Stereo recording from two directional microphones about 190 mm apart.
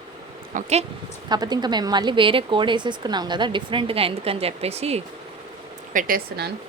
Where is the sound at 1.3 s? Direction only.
20° right (ahead or behind).